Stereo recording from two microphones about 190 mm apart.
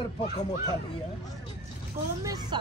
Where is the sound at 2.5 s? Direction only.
25° right (ahead or behind).